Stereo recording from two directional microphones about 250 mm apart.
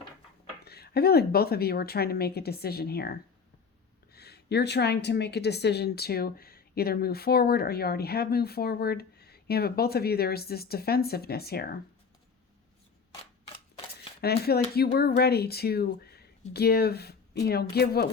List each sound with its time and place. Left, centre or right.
0.6 s a woman's voice: left
14.4 s a woman's voice: left